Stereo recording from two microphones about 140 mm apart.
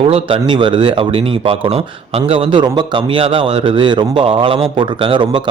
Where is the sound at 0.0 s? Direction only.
40° right (ahead or behind).